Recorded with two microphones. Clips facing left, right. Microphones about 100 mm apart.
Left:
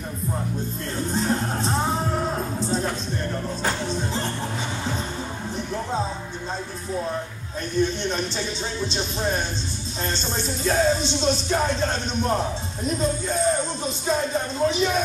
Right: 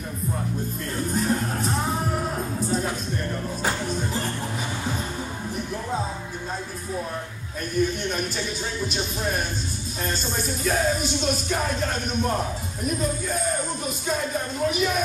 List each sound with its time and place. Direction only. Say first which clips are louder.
1.1 s music: left 1 dB; 25° left (ahead or behind)
3.8 s music: left 1 dB; 25° left (ahead or behind)
7.7 s music: left 1 dB; 25° left (ahead or behind)
10.0 s speech: even; 25° left (ahead or behind)